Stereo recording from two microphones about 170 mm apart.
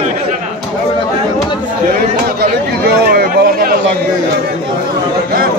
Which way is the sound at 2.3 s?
65° right (ahead or behind).